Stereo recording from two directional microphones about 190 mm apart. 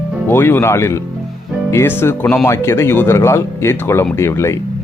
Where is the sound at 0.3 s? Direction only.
10° left (ahead or behind).